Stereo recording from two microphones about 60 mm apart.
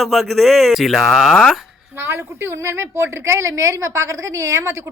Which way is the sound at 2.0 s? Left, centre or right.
Right.